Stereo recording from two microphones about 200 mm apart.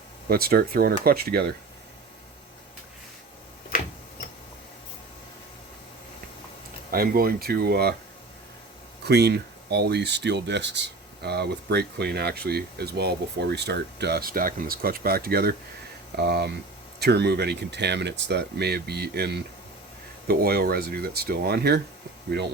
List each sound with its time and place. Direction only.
0.3 s speech: 50° right (ahead or behind)
6.9 s speech: 50° right (ahead or behind)
9.0 s speech: 55° right (ahead or behind)